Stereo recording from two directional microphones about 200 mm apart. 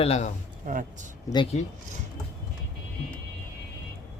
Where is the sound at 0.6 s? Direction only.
40° right (ahead or behind).